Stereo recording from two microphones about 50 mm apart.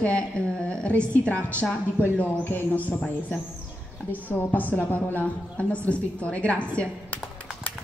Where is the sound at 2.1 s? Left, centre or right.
Left.